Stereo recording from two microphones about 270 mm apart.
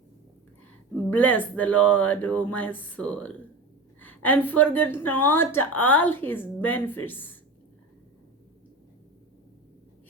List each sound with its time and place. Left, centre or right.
0.9 s a woman's voice: centre